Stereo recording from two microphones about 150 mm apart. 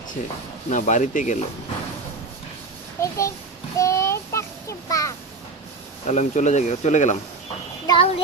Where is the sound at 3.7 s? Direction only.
20° left (ahead or behind).